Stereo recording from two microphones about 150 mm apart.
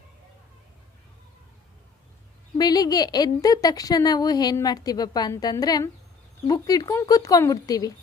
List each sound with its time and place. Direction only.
2.6 s a woman's voice: 25° left (ahead or behind)